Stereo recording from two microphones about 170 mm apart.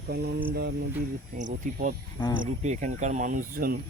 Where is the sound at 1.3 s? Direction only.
55° right (ahead or behind).